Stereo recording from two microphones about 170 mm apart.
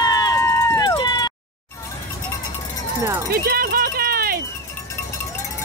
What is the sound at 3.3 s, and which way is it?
Run, 60° right (ahead or behind).